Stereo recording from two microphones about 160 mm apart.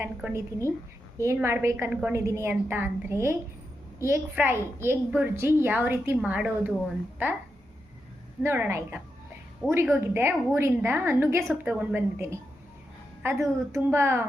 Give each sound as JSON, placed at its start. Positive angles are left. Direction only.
{"t": 0.0, "sound": "a woman's voice", "side_deg": -15}
{"t": 8.4, "sound": "a woman's voice", "side_deg": -10}